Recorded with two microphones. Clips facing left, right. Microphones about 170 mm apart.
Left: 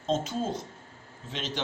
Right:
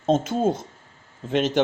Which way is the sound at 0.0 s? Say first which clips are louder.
Right 8 dB; 55° right (ahead or behind).